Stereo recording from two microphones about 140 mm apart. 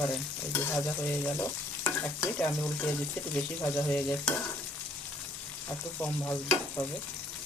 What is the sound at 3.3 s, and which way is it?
Frying, 10° left (ahead or behind).